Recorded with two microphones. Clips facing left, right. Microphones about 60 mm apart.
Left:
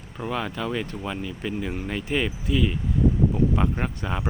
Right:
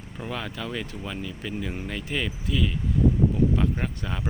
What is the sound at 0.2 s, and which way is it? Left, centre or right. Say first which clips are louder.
Speech: left 5 dB; centre.